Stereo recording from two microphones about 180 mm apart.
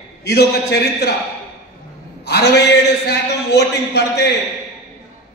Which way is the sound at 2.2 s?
70° left (ahead or behind).